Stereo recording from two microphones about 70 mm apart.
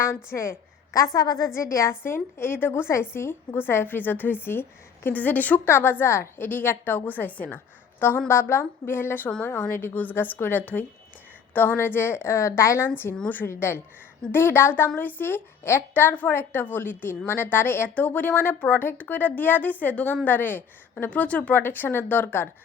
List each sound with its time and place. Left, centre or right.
0.1 s a woman's voice: left
0.9 s a woman's voice: left
1.5 s a woman's voice: left
5.5 s a woman's voice: left
13.5 s a woman's voice: left; by 21.6 s centre
21.6 s a woman's voice: left